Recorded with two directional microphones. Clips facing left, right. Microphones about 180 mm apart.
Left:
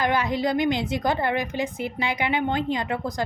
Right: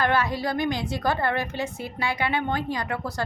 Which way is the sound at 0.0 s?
15° left (ahead or behind).